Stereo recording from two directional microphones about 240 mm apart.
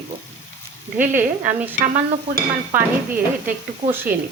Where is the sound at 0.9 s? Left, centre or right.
Centre.